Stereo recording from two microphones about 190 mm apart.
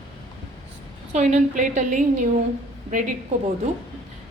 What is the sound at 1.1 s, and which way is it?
A woman's voice, 40° right (ahead or behind).